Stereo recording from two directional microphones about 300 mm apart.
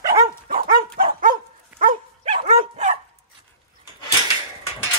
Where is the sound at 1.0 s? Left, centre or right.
Right.